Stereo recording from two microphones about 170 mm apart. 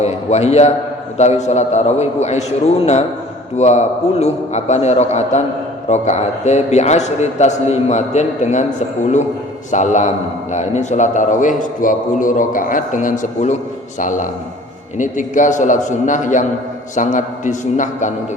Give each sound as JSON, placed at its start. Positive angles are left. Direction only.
{"t": 0.0, "sound": "a man's voice", "side_deg": 40}
{"t": 9.7, "sound": "a man's voice", "side_deg": 45}